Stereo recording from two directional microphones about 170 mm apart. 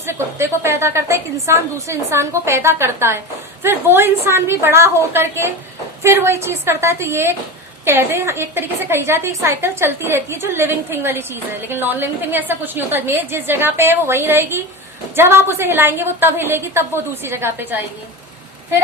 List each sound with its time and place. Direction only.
0.0 s a woman's voice: 15° right (ahead or behind)